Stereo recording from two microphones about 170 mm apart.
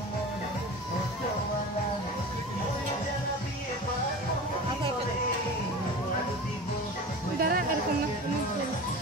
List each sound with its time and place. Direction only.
7.3 s music: 60° right (ahead or behind)